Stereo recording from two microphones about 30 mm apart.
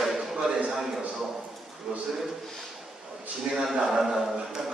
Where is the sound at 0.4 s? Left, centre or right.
Right.